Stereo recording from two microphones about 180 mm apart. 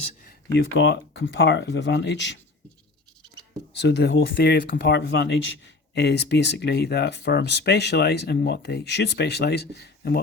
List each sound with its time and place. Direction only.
0.5 s speech: 75° left (ahead or behind)
3.8 s speech: 75° left (ahead or behind)